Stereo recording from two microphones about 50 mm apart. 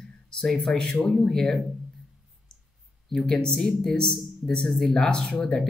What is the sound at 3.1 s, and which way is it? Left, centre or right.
Speech, centre.